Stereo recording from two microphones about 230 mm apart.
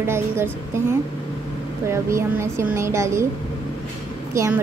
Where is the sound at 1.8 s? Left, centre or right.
Centre.